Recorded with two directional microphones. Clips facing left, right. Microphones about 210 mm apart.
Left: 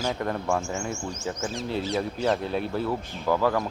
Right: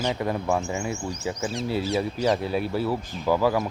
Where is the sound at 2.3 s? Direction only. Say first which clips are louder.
Right 1 dB; 5° right (ahead or behind).